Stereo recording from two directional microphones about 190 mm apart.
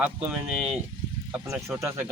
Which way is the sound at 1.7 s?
15° right (ahead or behind).